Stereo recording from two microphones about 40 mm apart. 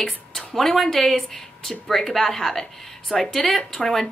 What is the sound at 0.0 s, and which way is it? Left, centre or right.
Speech, centre.